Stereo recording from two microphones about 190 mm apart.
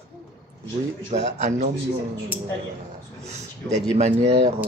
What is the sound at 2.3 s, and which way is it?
Speech, 10° right (ahead or behind).